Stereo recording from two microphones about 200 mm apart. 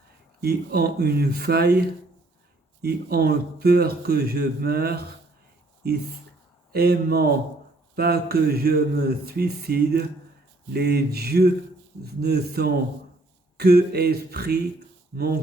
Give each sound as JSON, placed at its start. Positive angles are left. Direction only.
{"t": 0.4, "sound": "a man's voice", "side_deg": -55}